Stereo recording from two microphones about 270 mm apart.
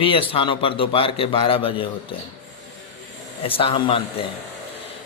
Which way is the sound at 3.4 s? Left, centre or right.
Centre.